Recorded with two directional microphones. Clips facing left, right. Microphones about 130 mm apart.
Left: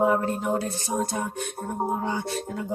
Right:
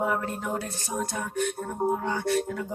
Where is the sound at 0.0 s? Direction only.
25° left (ahead or behind).